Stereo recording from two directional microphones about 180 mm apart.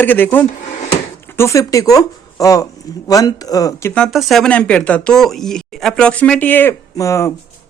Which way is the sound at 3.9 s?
Centre (ahead or behind).